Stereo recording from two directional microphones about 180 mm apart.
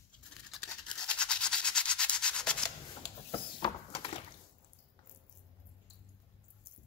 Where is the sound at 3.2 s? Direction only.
30° left (ahead or behind).